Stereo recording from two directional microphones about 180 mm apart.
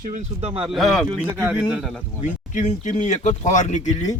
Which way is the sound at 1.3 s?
10° right (ahead or behind).